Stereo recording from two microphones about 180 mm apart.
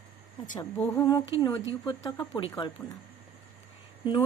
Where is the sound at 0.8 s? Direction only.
15° left (ahead or behind).